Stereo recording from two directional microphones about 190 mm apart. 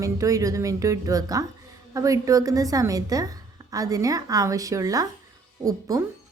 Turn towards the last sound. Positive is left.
turn(degrees=-20)  # may be behind; listen again after turning